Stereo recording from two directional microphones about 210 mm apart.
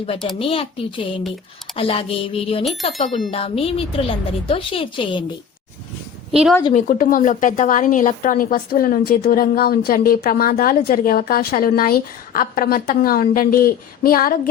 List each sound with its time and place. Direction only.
0.3 s a woman's voice: 25° left (ahead or behind)
6.3 s a woman's voice: 5° right (ahead or behind)
6.7 s a woman's voice: 40° left (ahead or behind)